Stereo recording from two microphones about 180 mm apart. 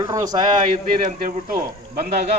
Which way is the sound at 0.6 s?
50° right (ahead or behind).